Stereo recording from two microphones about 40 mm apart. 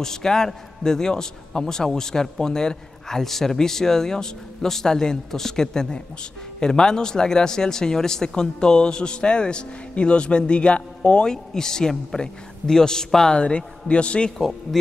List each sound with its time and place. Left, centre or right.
0.0 s a man's voice: centre
11.2 s a man's voice: centre